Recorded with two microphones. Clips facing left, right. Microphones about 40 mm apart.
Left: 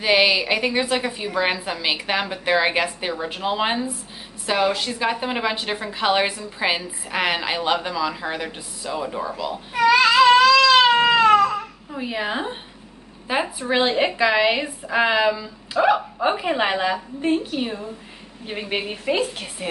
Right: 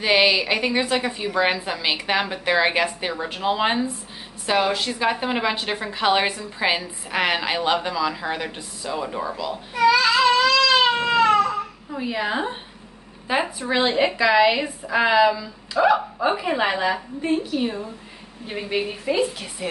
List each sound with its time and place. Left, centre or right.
0.2 s a woman's voice: centre
9.8 s baby cry: left
11.9 s a woman's voice: centre
13.6 s a woman's voice: centre
18.7 s a woman's voice: left